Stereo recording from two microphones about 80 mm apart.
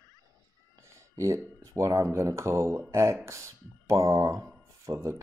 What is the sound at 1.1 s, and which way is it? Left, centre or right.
Speech, right.